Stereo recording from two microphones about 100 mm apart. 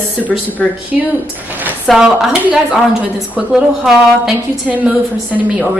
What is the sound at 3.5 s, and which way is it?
A woman's voice, 5° right (ahead or behind).